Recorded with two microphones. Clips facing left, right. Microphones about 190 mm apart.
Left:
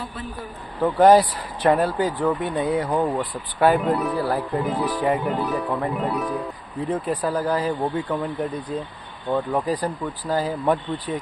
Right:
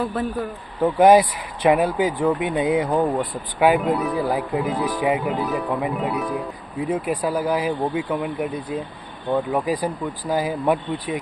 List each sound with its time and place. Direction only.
0.8 s speech: 10° right (ahead or behind)
4.2 s speech: 15° right (ahead or behind)
4.5 s speech: centre (ahead or behind)